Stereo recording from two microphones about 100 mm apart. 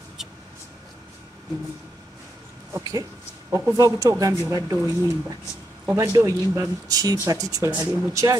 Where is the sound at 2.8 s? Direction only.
40° right (ahead or behind).